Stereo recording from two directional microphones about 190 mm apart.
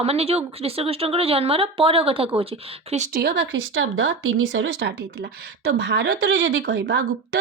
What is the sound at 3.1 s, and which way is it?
Speech, 55° right (ahead or behind).